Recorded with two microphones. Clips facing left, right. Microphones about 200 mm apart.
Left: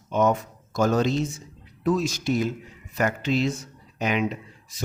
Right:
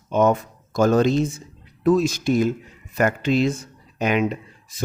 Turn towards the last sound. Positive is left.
turn(degrees=-50)  # may be behind; listen again after turning